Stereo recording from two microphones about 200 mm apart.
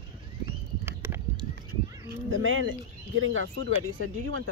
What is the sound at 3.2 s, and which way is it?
Speech, 90° right.